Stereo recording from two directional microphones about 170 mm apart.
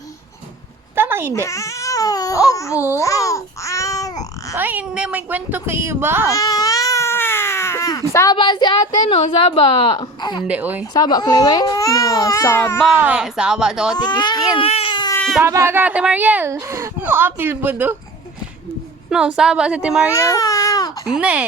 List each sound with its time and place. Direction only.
0.9 s a sound: 15° right (ahead or behind)
1.3 s speech: 20° left (ahead or behind)
3.0 s babbling: 20° left (ahead or behind)
4.5 s speech: 10° right (ahead or behind)
6.2 s baby cry: 20° left (ahead or behind)
10.4 s speech: 10° right (ahead or behind)
10.9 s speech: 25° left (ahead or behind)
13.0 s speech: 5° right (ahead or behind)
13.9 s speech: 25° left (ahead or behind)
14.6 s baby cry: 35° left (ahead or behind)
15.4 s speech: 15° right (ahead or behind)
19.4 s speech: 5° right (ahead or behind)
20.1 s baby cry: 15° left (ahead or behind)
21.1 s speech: 5° right (ahead or behind)